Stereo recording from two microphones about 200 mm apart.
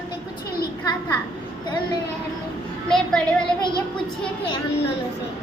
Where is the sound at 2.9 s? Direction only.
5° left (ahead or behind).